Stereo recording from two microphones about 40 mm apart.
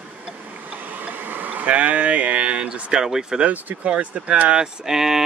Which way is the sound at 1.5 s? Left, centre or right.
Right.